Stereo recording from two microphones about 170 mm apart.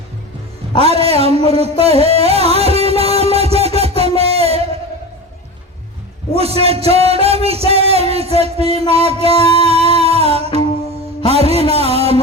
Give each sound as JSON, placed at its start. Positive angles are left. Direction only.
{"t": 0.8, "sound": "music", "side_deg": -35}
{"t": 3.3, "sound": "a sound", "side_deg": -35}
{"t": 6.3, "sound": "music", "side_deg": -35}